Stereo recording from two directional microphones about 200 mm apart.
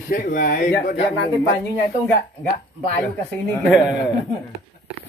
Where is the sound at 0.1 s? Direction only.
45° left (ahead or behind).